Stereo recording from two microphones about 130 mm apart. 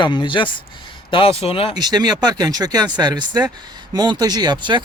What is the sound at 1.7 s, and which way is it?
Speech, 30° right (ahead or behind).